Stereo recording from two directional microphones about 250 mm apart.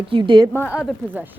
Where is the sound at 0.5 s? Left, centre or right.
Centre.